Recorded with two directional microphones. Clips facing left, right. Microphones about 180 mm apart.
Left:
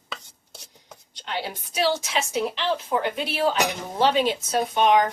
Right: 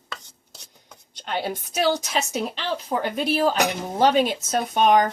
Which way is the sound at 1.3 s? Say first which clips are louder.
Right 4 dB; 50° right (ahead or behind).